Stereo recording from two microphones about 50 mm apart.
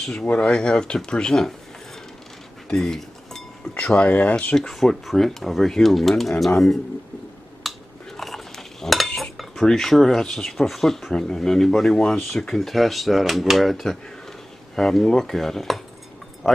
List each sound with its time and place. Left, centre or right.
0.2 s speech: left
2.7 s dishes: centre
3.8 s speech: left
4.6 s speech: centre
7.7 s a sound: centre
8.2 s stir: centre
9.1 s speech: centre